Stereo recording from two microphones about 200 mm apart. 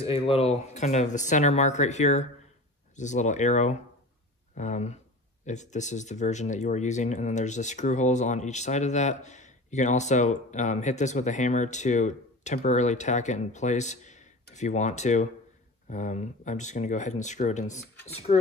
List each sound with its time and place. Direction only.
0.0 s speech: 30° left (ahead or behind)